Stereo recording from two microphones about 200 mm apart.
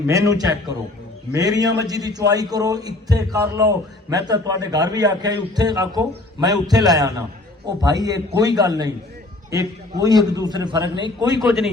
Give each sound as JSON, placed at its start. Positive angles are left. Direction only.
{"t": 0.1, "sound": "a man's voice", "side_deg": -15}